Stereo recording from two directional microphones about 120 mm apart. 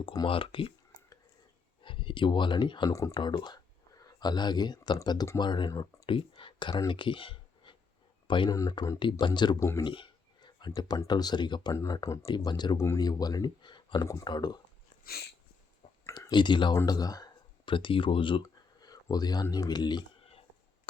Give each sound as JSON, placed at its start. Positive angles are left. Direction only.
{"t": 0.0, "sound": "speech", "side_deg": 40}
{"t": 1.8, "sound": "speech", "side_deg": 45}
{"t": 2.9, "sound": "speech", "side_deg": 25}
{"t": 3.2, "sound": "speech", "side_deg": 40}
{"t": 5.7, "sound": "speech", "side_deg": 30}
{"t": 6.1, "sound": "speech", "side_deg": 45}
{"t": 8.4, "sound": "speech", "side_deg": 30}
{"t": 9.0, "sound": "speech", "side_deg": 40}
{"t": 9.6, "sound": "speech", "side_deg": 25}
{"t": 9.8, "sound": "a sound", "side_deg": 40}
{"t": 10.8, "sound": "speech", "side_deg": 35}
{"t": 12.7, "sound": "speech", "side_deg": 25}
{"t": 13.0, "sound": "speech", "side_deg": 35}
{"t": 16.1, "sound": "speech", "side_deg": 40}